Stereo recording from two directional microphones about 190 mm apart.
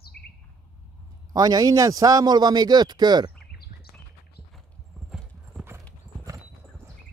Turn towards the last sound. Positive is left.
turn(degrees=0)  # may be behind; listen again after turning